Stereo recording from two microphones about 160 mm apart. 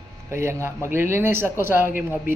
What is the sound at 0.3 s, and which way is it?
A man's voice, 15° right (ahead or behind).